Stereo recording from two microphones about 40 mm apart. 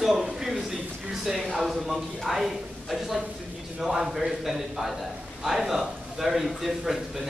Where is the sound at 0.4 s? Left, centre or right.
Centre.